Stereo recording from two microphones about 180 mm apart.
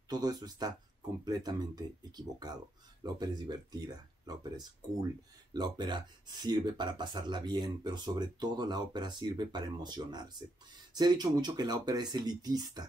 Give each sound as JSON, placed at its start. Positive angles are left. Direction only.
{"t": 0.1, "sound": "speech", "side_deg": -20}